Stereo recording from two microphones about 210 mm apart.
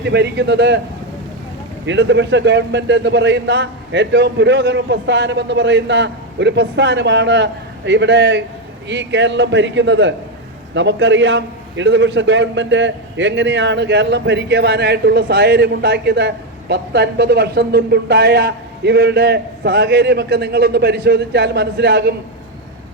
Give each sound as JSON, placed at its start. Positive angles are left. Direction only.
{"t": 0.0, "sound": "a man's voice", "side_deg": -55}
{"t": 1.9, "sound": "a man's voice", "side_deg": -60}